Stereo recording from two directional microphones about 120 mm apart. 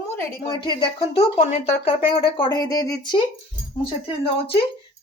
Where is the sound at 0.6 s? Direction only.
40° left (ahead or behind).